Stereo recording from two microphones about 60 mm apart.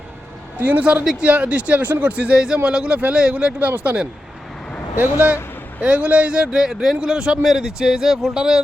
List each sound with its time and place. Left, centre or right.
0.6 s speech: right
4.9 s a man's voice: right; by 8.6 s centre